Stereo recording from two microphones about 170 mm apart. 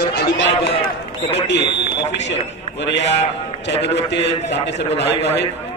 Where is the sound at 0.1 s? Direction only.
80° left.